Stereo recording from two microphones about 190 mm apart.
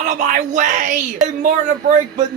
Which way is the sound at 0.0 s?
40° right (ahead or behind).